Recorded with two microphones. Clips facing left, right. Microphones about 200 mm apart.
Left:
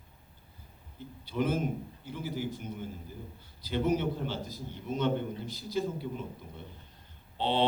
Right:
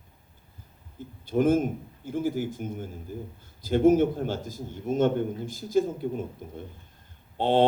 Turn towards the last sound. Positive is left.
turn(degrees=-50)  # may be behind; listen again after turning